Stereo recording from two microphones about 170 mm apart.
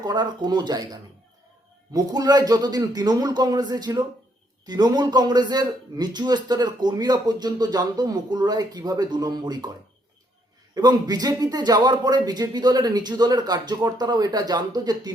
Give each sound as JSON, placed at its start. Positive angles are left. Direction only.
{"t": 0.0, "sound": "a man's voice", "side_deg": -25}
{"t": 1.9, "sound": "a man's voice", "side_deg": -20}
{"t": 10.8, "sound": "a man's voice", "side_deg": -25}